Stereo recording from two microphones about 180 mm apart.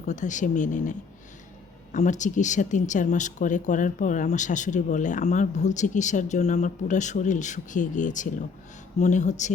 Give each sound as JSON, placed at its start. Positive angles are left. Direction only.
{"t": 0.0, "sound": "speech", "side_deg": 40}